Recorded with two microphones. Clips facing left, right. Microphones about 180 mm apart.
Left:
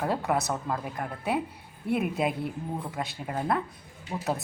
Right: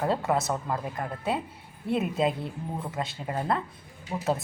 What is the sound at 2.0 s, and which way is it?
Speech, 10° left (ahead or behind).